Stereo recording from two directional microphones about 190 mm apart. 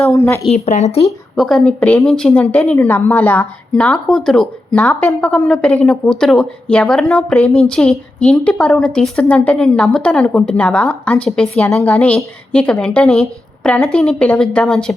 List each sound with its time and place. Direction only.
0.1 s speech: 15° left (ahead or behind)
0.4 s speech: 35° left (ahead or behind)
1.0 s speech: centre (ahead or behind)